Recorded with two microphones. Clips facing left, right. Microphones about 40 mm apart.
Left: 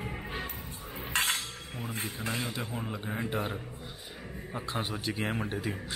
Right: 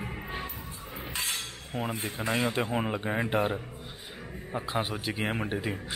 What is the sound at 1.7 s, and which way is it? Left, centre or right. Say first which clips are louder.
Speech: right 6 dB; right.